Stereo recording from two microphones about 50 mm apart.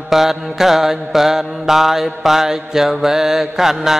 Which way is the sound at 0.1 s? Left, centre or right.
Centre.